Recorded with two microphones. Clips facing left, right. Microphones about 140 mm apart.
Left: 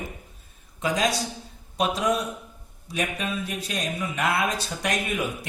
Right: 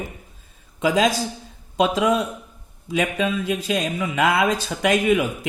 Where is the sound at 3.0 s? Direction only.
90° right.